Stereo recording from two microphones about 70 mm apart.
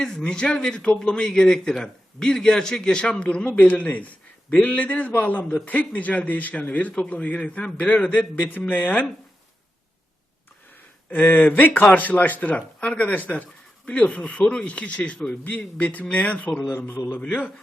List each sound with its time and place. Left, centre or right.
0.0 s speech: centre; by 9.0 s left
11.1 s speech: left
16.6 s a man's voice: left